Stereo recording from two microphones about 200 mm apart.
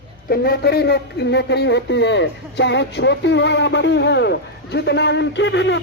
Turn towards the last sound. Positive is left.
turn(degrees=65)  # may be behind; listen again after turning